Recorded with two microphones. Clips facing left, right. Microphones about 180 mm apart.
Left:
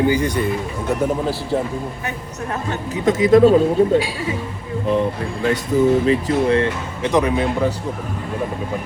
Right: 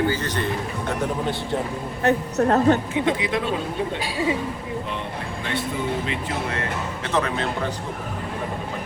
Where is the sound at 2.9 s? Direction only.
45° left (ahead or behind).